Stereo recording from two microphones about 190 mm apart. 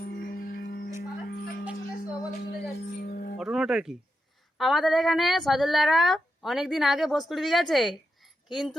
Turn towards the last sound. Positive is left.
turn(degrees=0)  # may be behind; listen again after turning